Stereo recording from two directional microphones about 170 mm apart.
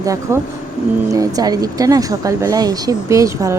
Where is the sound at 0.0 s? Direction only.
20° right (ahead or behind).